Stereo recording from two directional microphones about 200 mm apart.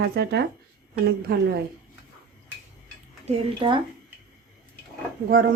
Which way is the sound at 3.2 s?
25° right (ahead or behind).